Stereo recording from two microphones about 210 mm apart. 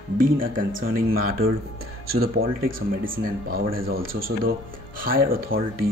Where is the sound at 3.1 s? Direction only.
45° right (ahead or behind).